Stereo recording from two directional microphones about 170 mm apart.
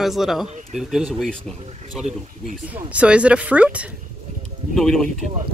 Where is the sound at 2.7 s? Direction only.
10° right (ahead or behind).